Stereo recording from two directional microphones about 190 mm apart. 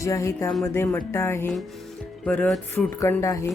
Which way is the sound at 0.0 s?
15° left (ahead or behind).